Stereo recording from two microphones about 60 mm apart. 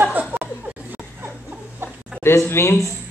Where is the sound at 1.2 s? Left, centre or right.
Right.